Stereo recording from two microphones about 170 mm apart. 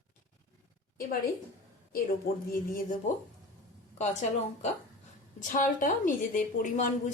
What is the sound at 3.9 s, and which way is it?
A woman's voice, 45° left (ahead or behind).